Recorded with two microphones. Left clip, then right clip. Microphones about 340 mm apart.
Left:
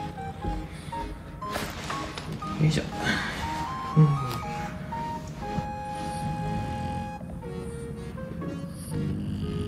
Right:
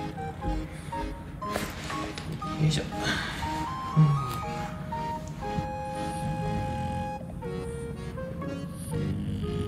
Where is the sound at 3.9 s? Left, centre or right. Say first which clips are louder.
Left 3 dB; centre.